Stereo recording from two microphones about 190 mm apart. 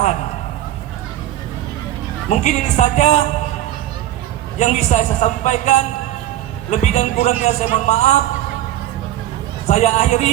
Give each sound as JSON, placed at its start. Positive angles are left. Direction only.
{"t": 2.3, "sound": "a man's voice", "side_deg": 35}
{"t": 4.5, "sound": "a man's voice", "side_deg": 35}
{"t": 9.6, "sound": "a man's voice", "side_deg": 35}